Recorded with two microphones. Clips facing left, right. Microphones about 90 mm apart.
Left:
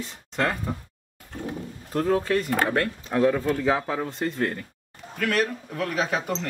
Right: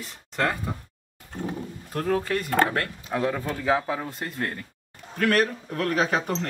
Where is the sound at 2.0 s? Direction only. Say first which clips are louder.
Left 2 dB; 25° left (ahead or behind).